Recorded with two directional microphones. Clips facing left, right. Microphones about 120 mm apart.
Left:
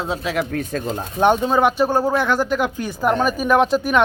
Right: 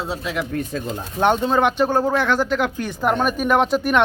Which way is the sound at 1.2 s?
15° left (ahead or behind).